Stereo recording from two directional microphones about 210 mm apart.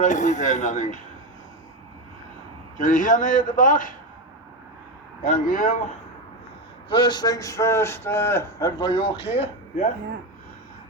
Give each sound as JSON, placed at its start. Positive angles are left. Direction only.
{"t": 0.0, "sound": "a man's voice", "side_deg": 35}
{"t": 2.7, "sound": "a man's voice", "side_deg": 40}
{"t": 5.2, "sound": "a man's voice", "side_deg": 40}
{"t": 6.9, "sound": "speech", "side_deg": 20}